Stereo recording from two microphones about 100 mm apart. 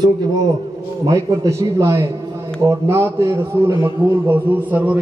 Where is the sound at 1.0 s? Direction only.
35° right (ahead or behind).